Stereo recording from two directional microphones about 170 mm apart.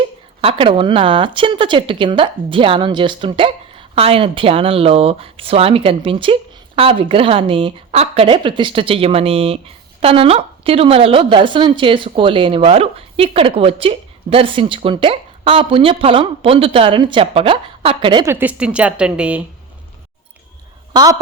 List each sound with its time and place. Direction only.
0.4 s a woman's voice: 30° right (ahead or behind)
18.3 s speech: 10° right (ahead or behind)
20.9 s speech: 20° right (ahead or behind)